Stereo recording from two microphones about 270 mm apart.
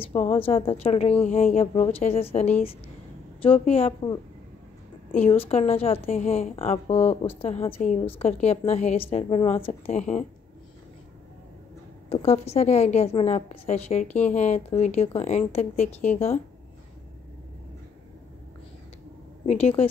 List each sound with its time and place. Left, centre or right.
0.0 s a woman's voice: left
12.1 s a woman's voice: left
19.4 s a woman's voice: left